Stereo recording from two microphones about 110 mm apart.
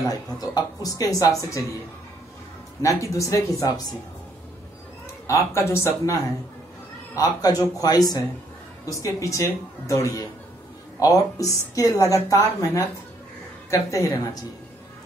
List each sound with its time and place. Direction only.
0.1 s a woman's voice: 35° left (ahead or behind)
2.8 s speech: 30° left (ahead or behind)
5.2 s speech: 25° left (ahead or behind)
7.2 s a woman's voice: 35° left (ahead or behind)